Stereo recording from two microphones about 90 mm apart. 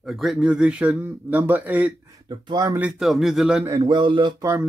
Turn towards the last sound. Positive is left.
turn(degrees=-65)  # may be behind; listen again after turning